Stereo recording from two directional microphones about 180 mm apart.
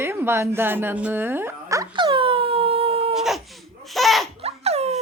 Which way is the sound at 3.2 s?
Centre (ahead or behind).